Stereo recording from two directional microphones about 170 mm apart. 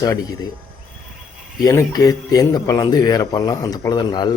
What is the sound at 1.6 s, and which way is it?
Speech, 20° left (ahead or behind).